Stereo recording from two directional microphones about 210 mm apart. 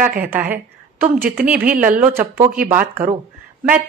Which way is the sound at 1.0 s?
45° right (ahead or behind).